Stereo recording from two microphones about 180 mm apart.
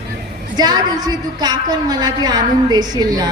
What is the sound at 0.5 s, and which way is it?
A woman's voice, 20° right (ahead or behind).